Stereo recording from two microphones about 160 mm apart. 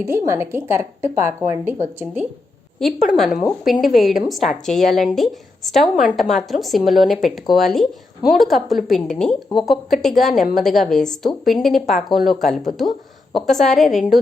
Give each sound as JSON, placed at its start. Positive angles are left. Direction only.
{"t": 0.0, "sound": "a woman's voice", "side_deg": -15}
{"t": 2.7, "sound": "a woman's voice", "side_deg": 0}